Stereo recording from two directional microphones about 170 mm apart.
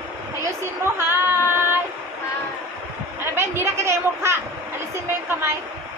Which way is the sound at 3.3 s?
15° right (ahead or behind).